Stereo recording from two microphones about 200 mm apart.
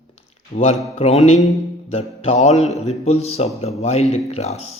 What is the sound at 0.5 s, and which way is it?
Speech, 30° left (ahead or behind).